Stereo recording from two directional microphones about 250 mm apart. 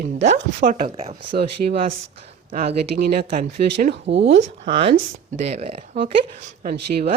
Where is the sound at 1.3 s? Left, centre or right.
Right.